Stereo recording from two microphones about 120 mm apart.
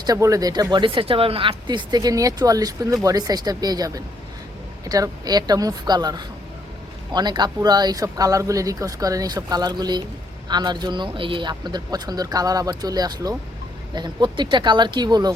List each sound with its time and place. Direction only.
0.0 s speech: 30° right (ahead or behind)